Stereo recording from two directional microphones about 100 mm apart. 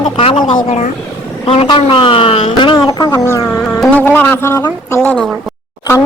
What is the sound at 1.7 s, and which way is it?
A woman's voice, 60° left (ahead or behind).